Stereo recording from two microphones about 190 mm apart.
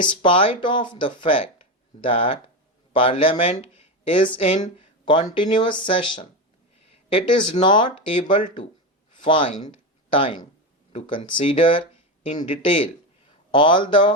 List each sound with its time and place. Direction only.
0.0 s speech: 25° left (ahead or behind)
9.6 s a sound: 25° left (ahead or behind)
11.1 s speech: 25° left (ahead or behind)